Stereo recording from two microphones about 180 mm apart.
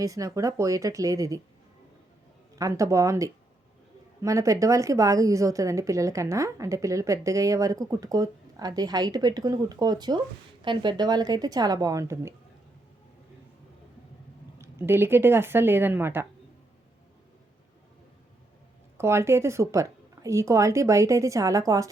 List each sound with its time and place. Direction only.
0.0 s a woman's voice: 20° right (ahead or behind)
2.6 s a woman's voice: 20° right (ahead or behind)
14.6 s a woman's voice: 15° right (ahead or behind)
18.9 s a woman's voice: 15° right (ahead or behind)